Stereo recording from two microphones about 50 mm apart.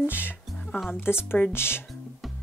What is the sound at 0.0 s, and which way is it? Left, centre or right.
A woman's voice, left.